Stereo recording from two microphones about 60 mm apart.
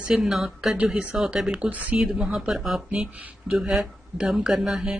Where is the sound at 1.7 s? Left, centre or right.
Right.